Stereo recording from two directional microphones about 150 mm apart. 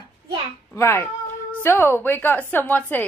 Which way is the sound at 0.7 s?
20° left (ahead or behind).